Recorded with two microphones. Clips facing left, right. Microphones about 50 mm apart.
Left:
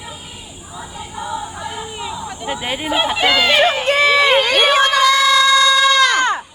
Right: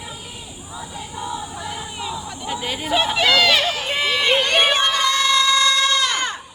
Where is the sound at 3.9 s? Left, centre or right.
Left.